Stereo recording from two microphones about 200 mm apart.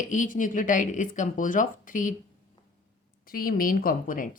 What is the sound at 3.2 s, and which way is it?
A woman's voice, 45° left (ahead or behind).